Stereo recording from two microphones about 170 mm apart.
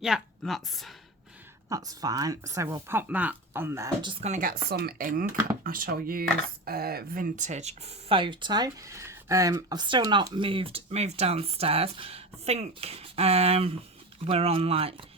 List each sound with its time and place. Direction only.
0.0 s a woman's voice: centre (ahead or behind)
1.7 s speech: 20° right (ahead or behind)
4.0 s speech: 30° right (ahead or behind)
4.3 s speech: 55° right (ahead or behind); by 14.9 s 35° right (ahead or behind)